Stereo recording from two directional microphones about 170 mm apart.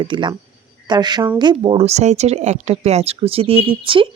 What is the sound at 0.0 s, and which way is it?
A woman's voice, 30° right (ahead or behind).